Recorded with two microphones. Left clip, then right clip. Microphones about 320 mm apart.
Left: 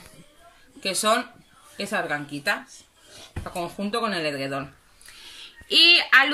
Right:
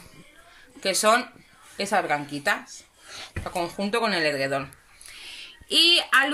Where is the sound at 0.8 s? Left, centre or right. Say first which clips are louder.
Right 2 dB; centre.